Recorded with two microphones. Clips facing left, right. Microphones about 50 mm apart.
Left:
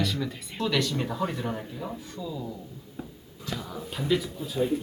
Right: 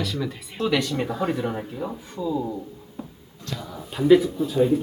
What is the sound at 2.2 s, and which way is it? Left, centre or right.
Speech, right.